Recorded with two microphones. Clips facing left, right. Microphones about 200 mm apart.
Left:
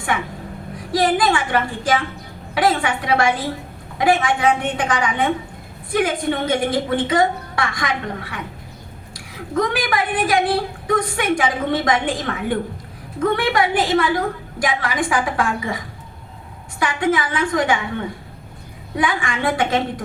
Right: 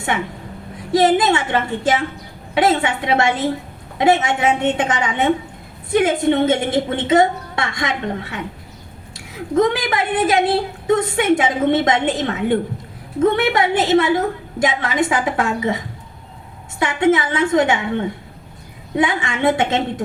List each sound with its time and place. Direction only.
0.1 s a woman's voice: 25° right (ahead or behind)
16.8 s a woman's voice: 25° right (ahead or behind)